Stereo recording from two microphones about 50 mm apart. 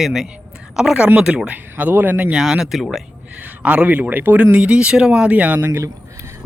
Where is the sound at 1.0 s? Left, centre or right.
Right.